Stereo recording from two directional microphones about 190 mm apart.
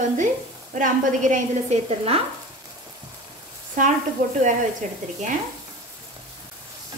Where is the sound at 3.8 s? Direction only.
45° right (ahead or behind).